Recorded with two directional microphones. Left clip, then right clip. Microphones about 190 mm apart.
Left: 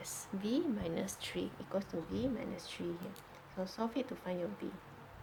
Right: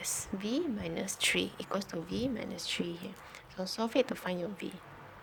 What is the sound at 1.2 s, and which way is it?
Speech, 50° right (ahead or behind).